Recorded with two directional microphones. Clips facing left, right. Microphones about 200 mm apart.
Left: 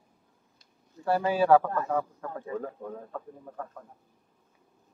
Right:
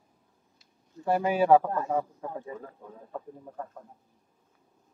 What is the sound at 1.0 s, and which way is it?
A man's voice, 15° right (ahead or behind).